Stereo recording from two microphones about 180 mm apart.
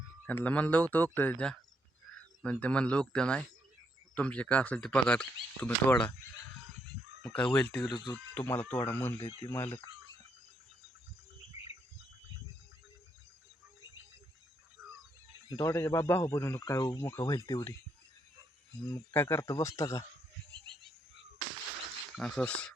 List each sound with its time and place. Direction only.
0.3 s speech: 10° left (ahead or behind)
7.2 s chicken: 5° left (ahead or behind)
7.5 s speech: 5° left (ahead or behind)
7.9 s speech: 25° left (ahead or behind)
8.1 s speech: 10° left (ahead or behind)
11.5 s bird: 15° right (ahead or behind)
15.4 s speech: 20° left (ahead or behind)
18.9 s speech: 15° left (ahead or behind)
22.1 s speech: 5° left (ahead or behind)